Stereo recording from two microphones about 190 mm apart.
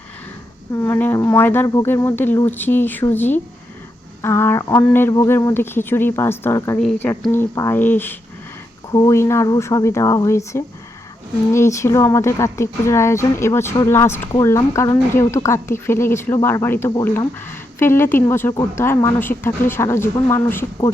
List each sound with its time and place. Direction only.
0.9 s a woman's voice: 10° left (ahead or behind)